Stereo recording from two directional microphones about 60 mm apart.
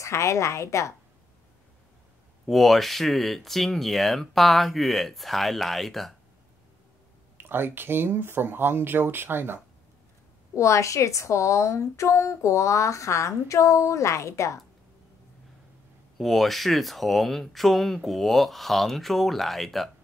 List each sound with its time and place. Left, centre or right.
0.0 s a woman's voice: left
2.4 s speech: centre
7.3 s speech: right
10.5 s a woman's voice: left
16.2 s speech: centre